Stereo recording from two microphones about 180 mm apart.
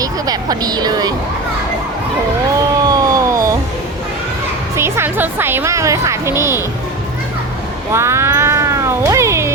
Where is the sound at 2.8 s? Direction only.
20° right (ahead or behind).